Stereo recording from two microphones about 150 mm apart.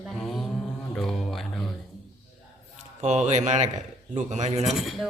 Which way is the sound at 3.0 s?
50° right (ahead or behind).